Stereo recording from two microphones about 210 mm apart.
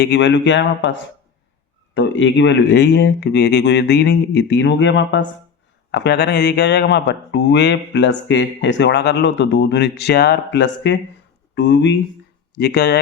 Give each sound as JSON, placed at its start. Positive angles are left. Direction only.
{"t": 0.0, "sound": "speech", "side_deg": 55}
{"t": 2.0, "sound": "speech", "side_deg": 60}